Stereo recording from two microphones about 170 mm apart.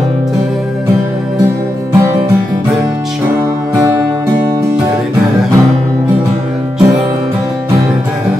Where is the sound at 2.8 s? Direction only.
20° right (ahead or behind).